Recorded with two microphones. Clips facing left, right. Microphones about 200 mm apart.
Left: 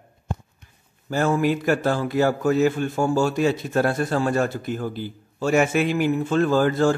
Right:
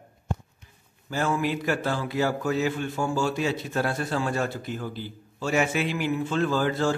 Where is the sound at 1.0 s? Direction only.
45° left (ahead or behind).